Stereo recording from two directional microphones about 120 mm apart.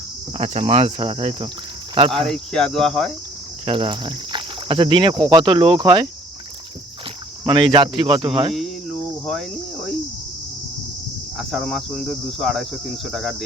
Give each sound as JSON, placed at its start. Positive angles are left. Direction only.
{"t": 0.3, "sound": "speech", "side_deg": -55}
{"t": 2.1, "sound": "cricket", "side_deg": 5}
{"t": 3.7, "sound": "speech", "side_deg": -40}
{"t": 7.4, "sound": "speech", "side_deg": -45}
{"t": 9.2, "sound": "cricket", "side_deg": 0}
{"t": 11.3, "sound": "cricket", "side_deg": 0}